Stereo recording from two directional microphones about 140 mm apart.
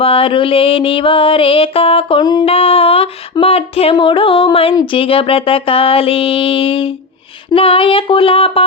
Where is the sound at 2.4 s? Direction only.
45° left (ahead or behind).